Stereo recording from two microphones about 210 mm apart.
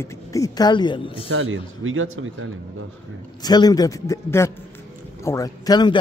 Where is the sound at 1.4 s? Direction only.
70° right (ahead or behind).